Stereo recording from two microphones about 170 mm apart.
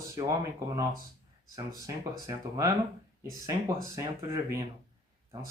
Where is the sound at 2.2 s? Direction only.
20° right (ahead or behind).